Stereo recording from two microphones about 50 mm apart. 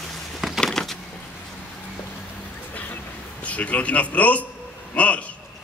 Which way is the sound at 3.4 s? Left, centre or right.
Left.